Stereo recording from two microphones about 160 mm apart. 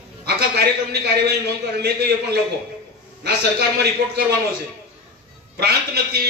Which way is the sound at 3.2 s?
90° right.